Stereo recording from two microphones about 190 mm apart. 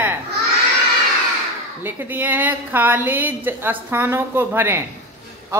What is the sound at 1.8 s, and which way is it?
A woman's voice, 10° right (ahead or behind).